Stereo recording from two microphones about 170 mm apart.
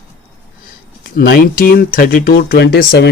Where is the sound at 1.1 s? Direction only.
65° left (ahead or behind).